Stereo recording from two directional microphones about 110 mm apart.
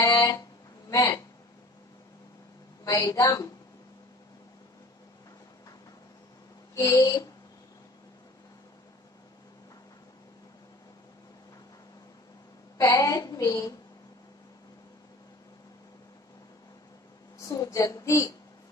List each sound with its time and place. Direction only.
0.0 s a sound: 30° left (ahead or behind)
2.8 s a woman's voice: 30° left (ahead or behind)
6.7 s speech: 30° left (ahead or behind)
12.7 s a woman's voice: 30° left (ahead or behind)
17.5 s a woman's voice: 30° left (ahead or behind)